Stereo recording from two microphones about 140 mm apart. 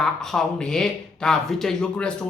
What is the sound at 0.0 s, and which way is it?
Speech, 5° left (ahead or behind).